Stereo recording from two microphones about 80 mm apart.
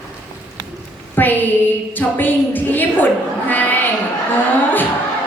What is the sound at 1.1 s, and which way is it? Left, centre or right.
A woman's voice, left.